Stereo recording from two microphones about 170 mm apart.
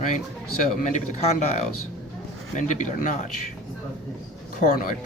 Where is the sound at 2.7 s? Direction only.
45° left (ahead or behind).